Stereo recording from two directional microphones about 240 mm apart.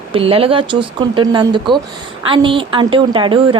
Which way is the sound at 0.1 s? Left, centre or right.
Right.